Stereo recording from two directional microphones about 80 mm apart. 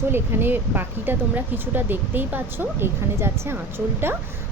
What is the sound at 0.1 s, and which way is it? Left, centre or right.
Speech, right.